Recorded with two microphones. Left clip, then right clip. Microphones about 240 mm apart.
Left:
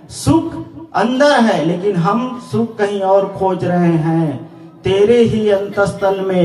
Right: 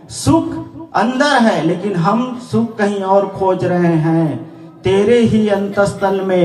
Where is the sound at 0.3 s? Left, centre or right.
Right.